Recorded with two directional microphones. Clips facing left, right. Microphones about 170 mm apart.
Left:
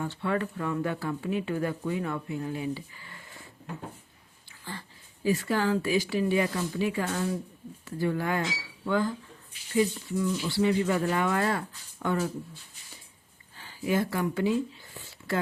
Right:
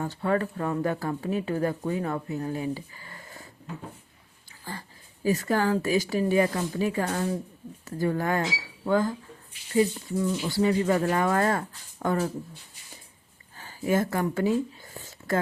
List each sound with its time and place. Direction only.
0.0 s speech: 40° right (ahead or behind)
5.2 s speech: 40° right (ahead or behind)
13.6 s a sound: 45° right (ahead or behind)